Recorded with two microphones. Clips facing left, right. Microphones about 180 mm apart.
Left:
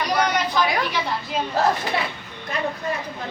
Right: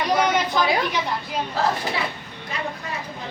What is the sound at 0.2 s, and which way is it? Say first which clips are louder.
Chatter: even; 25° right (ahead or behind).